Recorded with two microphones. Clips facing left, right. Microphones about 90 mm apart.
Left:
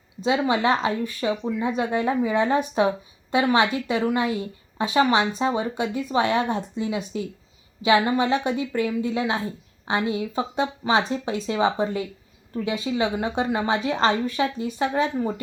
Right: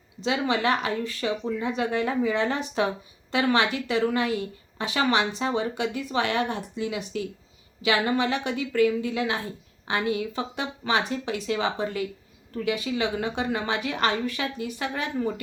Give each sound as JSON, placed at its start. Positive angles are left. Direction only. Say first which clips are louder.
{"t": 0.3, "sound": "a woman's voice", "louder": "left 3 dB", "side_deg": 20}